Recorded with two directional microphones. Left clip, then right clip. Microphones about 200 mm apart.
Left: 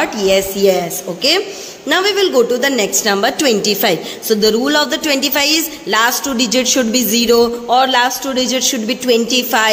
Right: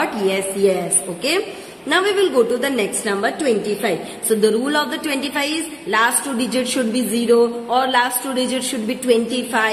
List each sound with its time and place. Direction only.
0.0 s a woman's voice: 25° left (ahead or behind)